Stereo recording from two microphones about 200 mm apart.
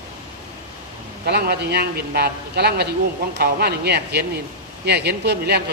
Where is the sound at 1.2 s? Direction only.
55° right (ahead or behind).